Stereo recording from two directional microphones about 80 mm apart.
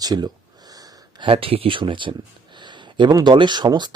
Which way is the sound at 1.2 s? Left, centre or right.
Right.